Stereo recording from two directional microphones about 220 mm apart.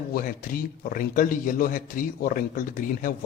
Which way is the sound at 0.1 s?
40° left (ahead or behind).